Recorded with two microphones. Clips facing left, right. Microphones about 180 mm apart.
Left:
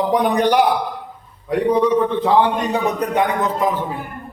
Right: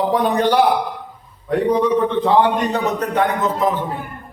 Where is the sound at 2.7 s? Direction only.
15° left (ahead or behind).